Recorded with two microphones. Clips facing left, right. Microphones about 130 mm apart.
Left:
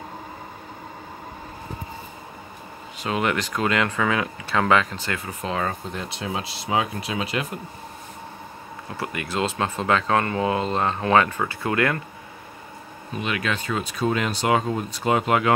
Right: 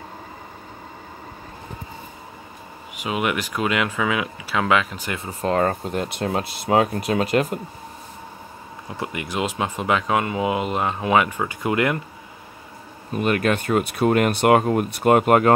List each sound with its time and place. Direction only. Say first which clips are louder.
3.0 s speech: even; 10° right (ahead or behind)
5.4 s speech: right 8 dB; 50° right (ahead or behind)
8.8 s speech: right 1 dB; 20° right (ahead or behind)
13.1 s speech: right 6 dB; 50° right (ahead or behind)